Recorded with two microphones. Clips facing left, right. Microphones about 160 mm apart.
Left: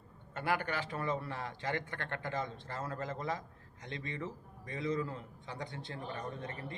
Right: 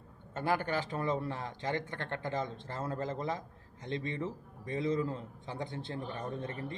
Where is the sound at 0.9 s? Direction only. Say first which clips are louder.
Right 3 dB; 25° right (ahead or behind).